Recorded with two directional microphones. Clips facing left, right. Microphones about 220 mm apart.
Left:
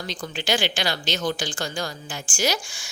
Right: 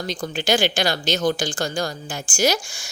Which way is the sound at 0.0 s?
45° right (ahead or behind).